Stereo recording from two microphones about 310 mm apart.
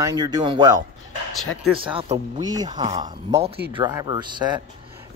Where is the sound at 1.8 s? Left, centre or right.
Centre.